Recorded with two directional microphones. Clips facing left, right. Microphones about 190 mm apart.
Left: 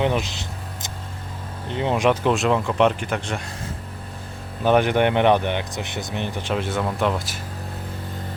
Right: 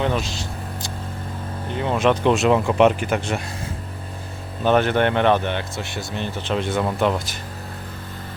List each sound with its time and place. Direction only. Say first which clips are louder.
0.0 s vehicle: left 1 dB; 20° left (ahead or behind)
1.7 s speech: even; 20° left (ahead or behind)
2.2 s speech: right 3 dB; centre (ahead or behind)
4.6 s speech: even; 15° left (ahead or behind)